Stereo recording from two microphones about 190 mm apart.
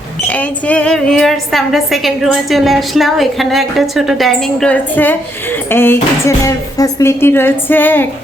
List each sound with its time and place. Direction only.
0.3 s a woman's voice: 5° left (ahead or behind)